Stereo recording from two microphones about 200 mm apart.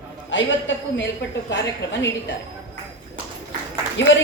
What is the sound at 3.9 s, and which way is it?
Speech, 65° left (ahead or behind).